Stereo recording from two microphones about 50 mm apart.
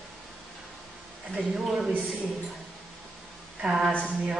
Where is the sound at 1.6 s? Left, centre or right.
Centre.